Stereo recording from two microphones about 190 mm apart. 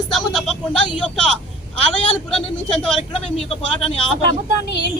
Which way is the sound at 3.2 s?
30° left (ahead or behind).